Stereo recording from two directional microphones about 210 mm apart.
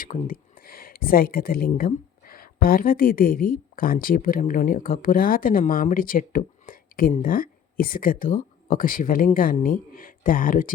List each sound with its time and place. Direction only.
0.0 s speech: 40° left (ahead or behind)